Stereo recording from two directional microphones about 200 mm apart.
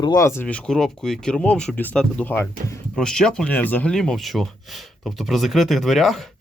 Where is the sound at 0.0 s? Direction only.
15° left (ahead or behind).